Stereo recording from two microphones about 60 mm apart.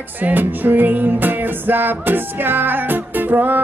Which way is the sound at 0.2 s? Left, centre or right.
Right.